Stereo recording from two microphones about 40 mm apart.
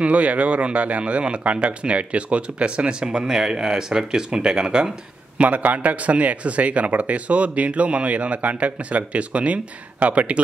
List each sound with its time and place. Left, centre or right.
0.0 s speech: right
5.4 s speech: right